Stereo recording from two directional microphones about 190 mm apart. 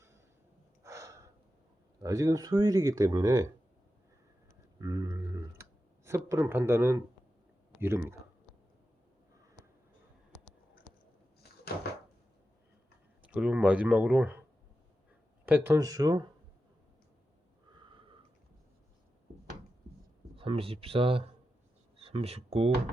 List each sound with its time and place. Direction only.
0.9 s gasp: 15° right (ahead or behind)
2.0 s speech: 15° right (ahead or behind)
4.8 s a sound: 20° right (ahead or behind)
6.1 s speech: 15° right (ahead or behind)
10.3 s a sound: 5° left (ahead or behind)
13.2 s speech: 5° right (ahead or behind)
15.4 s speech: 10° right (ahead or behind)
17.7 s snort: 25° right (ahead or behind)
20.3 s speech: 30° right (ahead or behind)